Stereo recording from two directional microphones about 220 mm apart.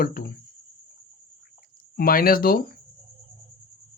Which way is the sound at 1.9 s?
40° left (ahead or behind).